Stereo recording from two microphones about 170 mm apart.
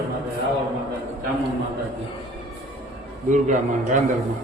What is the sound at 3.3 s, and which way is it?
Speech, 45° right (ahead or behind).